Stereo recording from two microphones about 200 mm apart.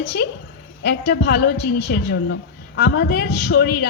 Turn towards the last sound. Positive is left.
turn(degrees=55)  # may be behind; listen again after turning